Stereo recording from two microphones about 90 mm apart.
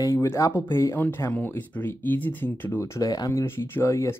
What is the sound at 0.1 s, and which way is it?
Speech, 30° left (ahead or behind).